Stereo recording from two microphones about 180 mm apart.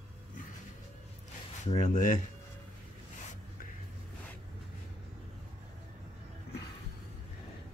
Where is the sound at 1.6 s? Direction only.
40° left (ahead or behind).